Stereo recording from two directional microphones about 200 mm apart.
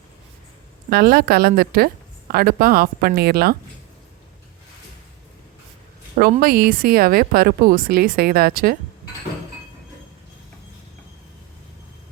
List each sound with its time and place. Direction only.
0.9 s a woman's voice: 50° right (ahead or behind)
6.4 s a woman's voice: 50° right (ahead or behind)